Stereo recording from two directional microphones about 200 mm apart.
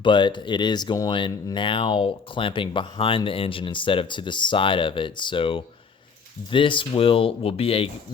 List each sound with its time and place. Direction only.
0.0 s speech: 25° left (ahead or behind)